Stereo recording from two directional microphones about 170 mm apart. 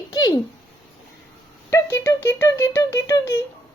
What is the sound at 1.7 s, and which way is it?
Speech, 15° left (ahead or behind).